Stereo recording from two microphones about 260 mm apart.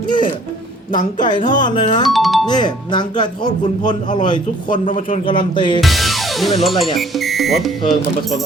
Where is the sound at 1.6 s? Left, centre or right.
Centre.